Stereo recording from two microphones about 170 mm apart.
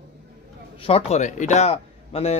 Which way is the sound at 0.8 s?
35° left (ahead or behind).